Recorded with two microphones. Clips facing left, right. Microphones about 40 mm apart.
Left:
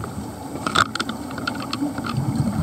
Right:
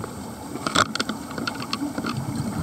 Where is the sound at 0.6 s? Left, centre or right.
Left.